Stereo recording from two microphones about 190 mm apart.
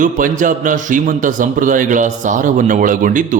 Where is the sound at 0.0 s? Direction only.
45° right (ahead or behind).